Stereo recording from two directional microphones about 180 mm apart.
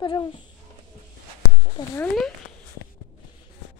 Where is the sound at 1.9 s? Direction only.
10° left (ahead or behind).